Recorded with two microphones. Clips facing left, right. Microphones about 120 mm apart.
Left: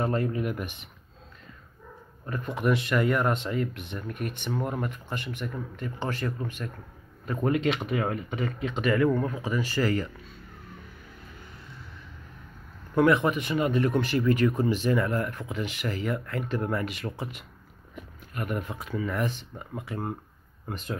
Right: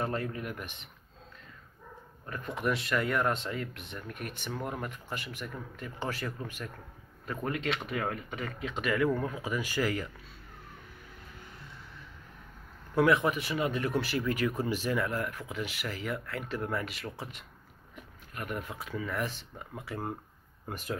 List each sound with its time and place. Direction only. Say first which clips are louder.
0.0 s speech: left 6 dB; 5° left (ahead or behind)
2.2 s speech: left 5 dB; 5° left (ahead or behind)
7.3 s speech: left 8 dB; 20° left (ahead or behind); by 10.1 s 10° right (ahead or behind)
12.9 s speech: left 4 dB; 5° right (ahead or behind)